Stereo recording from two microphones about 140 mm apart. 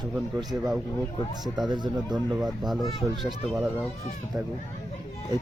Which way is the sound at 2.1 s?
Centre (ahead or behind).